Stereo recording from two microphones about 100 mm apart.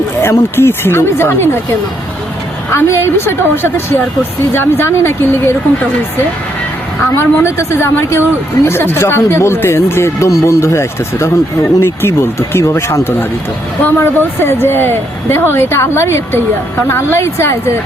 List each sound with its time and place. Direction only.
0.2 s speech: 25° left (ahead or behind)
2.7 s speech: 25° left (ahead or behind)
7.2 s speech: 25° left (ahead or behind)